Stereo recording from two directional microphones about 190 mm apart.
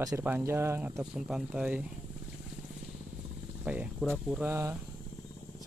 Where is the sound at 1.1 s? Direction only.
5° right (ahead or behind).